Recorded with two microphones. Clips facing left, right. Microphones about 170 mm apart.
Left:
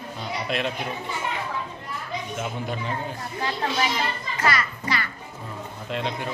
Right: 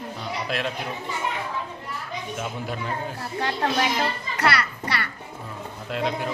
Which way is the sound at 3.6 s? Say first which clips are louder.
Right 2 dB; 50° right (ahead or behind).